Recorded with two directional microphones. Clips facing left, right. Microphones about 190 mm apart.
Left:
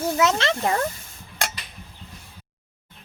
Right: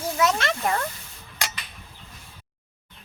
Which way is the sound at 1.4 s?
55° left (ahead or behind).